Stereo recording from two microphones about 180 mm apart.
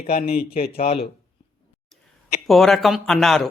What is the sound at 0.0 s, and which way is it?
Speech, 35° left (ahead or behind).